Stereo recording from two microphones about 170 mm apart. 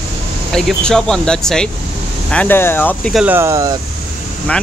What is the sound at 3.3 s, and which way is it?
Speech, 15° right (ahead or behind).